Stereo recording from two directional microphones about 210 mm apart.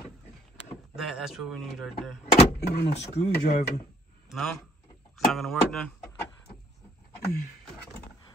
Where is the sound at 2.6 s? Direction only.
50° left (ahead or behind).